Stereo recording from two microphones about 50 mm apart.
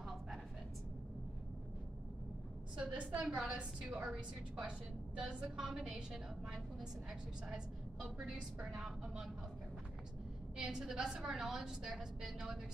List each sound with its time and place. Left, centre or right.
2.8 s a woman's voice: right
3.8 s a woman's voice: centre
7.1 s a woman's voice: centre
10.6 s a woman's voice: centre